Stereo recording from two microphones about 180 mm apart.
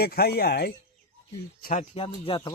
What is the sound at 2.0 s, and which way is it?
Speech, 30° left (ahead or behind).